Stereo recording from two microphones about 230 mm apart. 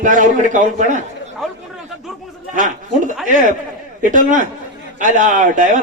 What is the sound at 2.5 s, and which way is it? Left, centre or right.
A man's voice, right.